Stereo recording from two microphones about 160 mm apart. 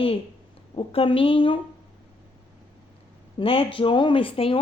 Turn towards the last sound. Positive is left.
turn(degrees=35)  # may be behind; listen again after turning